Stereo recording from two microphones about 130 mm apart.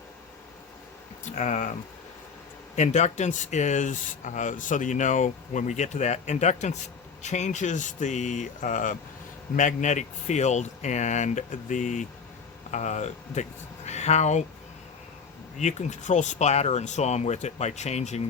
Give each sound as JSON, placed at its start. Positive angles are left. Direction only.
{"t": 1.2, "sound": "speech", "side_deg": 65}
{"t": 2.7, "sound": "speech", "side_deg": 65}
{"t": 9.6, "sound": "speech", "side_deg": 70}
{"t": 15.5, "sound": "speech", "side_deg": 65}